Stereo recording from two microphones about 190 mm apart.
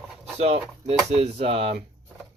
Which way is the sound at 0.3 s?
35° right (ahead or behind).